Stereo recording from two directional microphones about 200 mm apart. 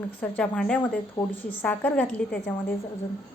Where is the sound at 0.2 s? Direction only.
5° left (ahead or behind).